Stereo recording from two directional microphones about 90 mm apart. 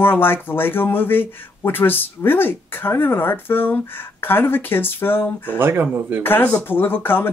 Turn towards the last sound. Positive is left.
turn(degrees=25)  # may be behind; listen again after turning